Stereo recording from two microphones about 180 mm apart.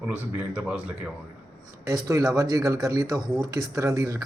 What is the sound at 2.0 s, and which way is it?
Speech, 15° right (ahead or behind).